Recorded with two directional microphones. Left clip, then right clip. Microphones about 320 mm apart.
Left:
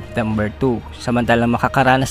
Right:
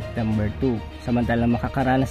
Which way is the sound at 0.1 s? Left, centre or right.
Left.